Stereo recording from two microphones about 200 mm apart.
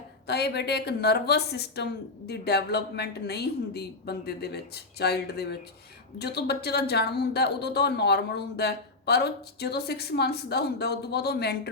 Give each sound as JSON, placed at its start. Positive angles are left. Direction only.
{"t": 0.3, "sound": "speech", "side_deg": 55}